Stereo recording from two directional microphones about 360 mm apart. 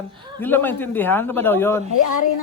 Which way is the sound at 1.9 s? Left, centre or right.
Left.